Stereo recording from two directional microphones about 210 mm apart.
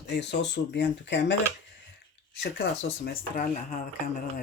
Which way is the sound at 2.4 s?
50° left (ahead or behind).